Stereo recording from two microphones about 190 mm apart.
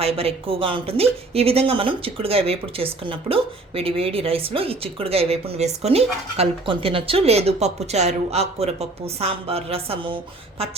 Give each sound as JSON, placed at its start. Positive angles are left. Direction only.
{"t": 0.0, "sound": "speech", "side_deg": -30}